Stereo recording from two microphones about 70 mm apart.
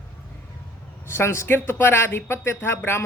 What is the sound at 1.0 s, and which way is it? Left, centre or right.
A man's voice, left.